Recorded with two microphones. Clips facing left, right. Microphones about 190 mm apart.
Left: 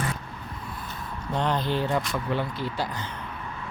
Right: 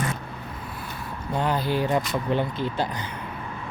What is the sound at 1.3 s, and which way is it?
Speech, 10° right (ahead or behind).